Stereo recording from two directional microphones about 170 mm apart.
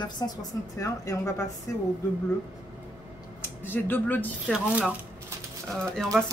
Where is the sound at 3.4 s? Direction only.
10° left (ahead or behind).